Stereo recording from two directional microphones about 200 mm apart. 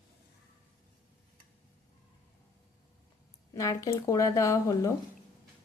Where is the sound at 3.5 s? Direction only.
15° left (ahead or behind).